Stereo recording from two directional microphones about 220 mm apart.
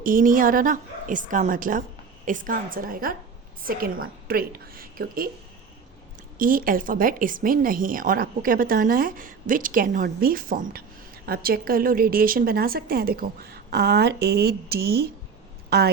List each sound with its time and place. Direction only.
0.0 s speech: 40° right (ahead or behind)
6.3 s a woman's voice: 40° right (ahead or behind)